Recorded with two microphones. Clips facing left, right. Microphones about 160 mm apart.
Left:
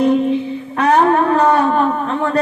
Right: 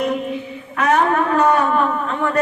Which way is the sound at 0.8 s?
35° left (ahead or behind).